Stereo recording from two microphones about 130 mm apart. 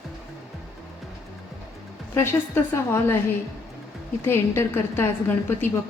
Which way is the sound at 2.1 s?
20° left (ahead or behind).